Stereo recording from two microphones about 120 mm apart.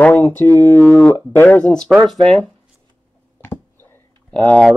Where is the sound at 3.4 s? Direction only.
20° left (ahead or behind).